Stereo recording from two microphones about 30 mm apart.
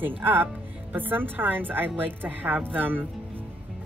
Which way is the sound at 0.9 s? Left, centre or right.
Right.